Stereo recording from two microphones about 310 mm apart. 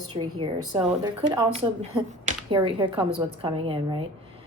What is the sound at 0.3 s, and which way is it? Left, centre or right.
A woman's voice, centre.